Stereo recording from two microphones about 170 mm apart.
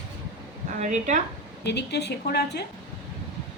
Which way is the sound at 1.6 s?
90° left.